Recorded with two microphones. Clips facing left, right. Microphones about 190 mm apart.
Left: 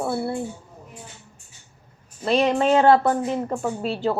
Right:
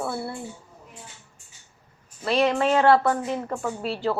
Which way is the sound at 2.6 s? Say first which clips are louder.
Left 3 dB; 25° left (ahead or behind).